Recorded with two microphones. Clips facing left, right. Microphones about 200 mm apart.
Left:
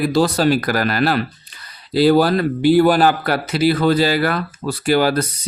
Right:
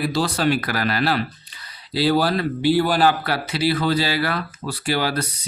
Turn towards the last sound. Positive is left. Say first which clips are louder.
# left 7 dB
turn(degrees=50)  # may be behind; listen again after turning